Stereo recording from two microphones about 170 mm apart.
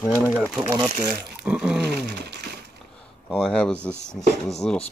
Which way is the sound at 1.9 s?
75° right (ahead or behind).